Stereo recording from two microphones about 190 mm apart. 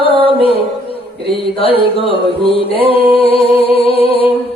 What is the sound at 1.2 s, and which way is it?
Music, 30° left (ahead or behind).